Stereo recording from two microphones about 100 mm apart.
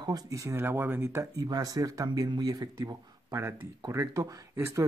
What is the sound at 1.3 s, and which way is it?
Speech, 35° right (ahead or behind).